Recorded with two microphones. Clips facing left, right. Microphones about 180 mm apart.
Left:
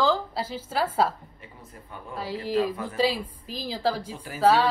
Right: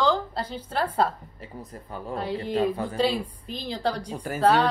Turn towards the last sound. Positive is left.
turn(degrees=5)  # may be behind; listen again after turning